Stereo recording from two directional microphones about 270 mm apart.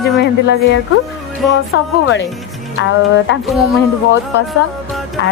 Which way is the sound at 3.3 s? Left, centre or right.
Left.